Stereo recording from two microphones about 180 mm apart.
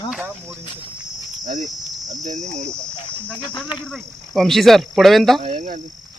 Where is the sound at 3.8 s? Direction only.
Centre (ahead or behind).